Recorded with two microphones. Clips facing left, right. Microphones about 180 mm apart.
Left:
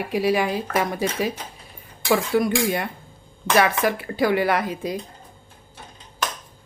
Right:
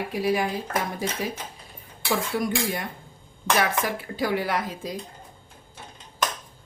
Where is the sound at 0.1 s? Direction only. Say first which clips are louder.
Left 5 dB; 80° left.